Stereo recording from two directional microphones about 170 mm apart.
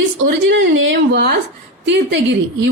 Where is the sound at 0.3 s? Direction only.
90° right.